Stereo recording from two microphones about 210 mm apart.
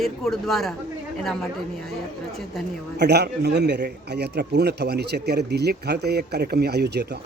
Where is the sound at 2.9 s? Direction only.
50° right (ahead or behind).